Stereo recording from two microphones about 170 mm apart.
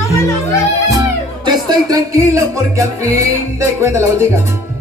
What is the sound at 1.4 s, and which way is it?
Music, 25° right (ahead or behind).